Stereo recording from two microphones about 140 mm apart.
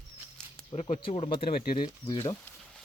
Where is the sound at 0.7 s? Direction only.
45° left (ahead or behind).